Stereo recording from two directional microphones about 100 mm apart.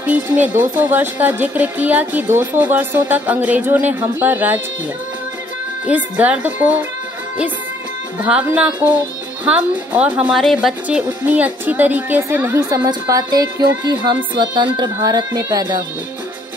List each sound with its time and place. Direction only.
0.0 s speech: 15° right (ahead or behind)
5.9 s speech: 15° right (ahead or behind)
8.2 s speech: 10° right (ahead or behind)
10.3 s speech: centre (ahead or behind)
10.9 s speech: 15° right (ahead or behind)
12.5 s speech: 35° right (ahead or behind)